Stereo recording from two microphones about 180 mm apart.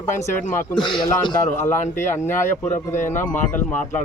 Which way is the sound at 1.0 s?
25° left (ahead or behind).